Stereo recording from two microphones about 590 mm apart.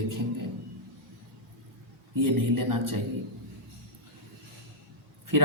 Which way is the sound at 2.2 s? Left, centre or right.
Right.